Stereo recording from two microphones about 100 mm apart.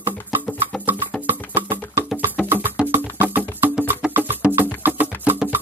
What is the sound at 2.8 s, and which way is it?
Music, 10° right (ahead or behind).